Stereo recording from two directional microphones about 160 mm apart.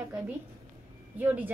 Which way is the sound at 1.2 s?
10° right (ahead or behind).